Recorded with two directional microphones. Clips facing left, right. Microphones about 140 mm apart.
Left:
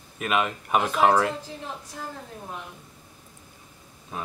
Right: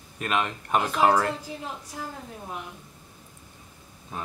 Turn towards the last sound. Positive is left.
turn(degrees=0)  # may be behind; listen again after turning